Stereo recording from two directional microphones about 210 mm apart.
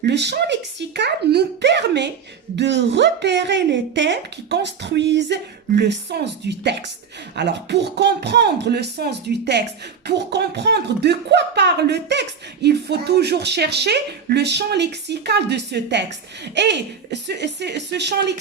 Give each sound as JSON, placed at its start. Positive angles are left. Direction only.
{"t": 0.0, "sound": "speech", "side_deg": -55}